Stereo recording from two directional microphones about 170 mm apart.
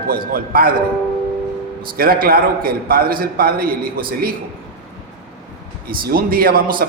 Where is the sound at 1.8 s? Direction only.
60° right (ahead or behind).